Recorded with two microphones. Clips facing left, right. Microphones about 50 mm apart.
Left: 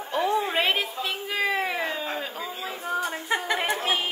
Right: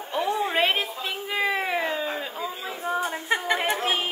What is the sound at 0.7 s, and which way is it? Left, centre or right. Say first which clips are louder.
Speech: even; centre.